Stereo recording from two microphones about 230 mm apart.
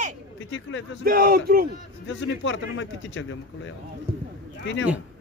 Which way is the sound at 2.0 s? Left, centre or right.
Left.